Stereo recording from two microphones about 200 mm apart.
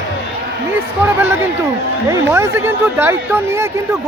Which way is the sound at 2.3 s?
10° right (ahead or behind).